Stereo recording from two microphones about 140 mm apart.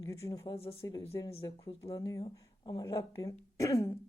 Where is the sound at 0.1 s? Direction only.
25° left (ahead or behind).